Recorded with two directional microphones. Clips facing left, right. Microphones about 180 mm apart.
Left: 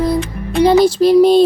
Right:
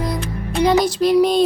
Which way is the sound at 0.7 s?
30° left (ahead or behind).